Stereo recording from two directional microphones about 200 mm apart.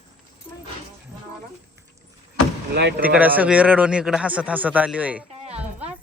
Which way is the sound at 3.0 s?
10° right (ahead or behind).